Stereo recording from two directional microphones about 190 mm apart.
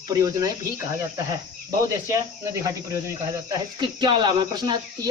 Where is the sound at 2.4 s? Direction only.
15° right (ahead or behind).